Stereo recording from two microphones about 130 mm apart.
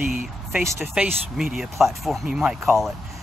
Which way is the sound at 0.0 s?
90° right.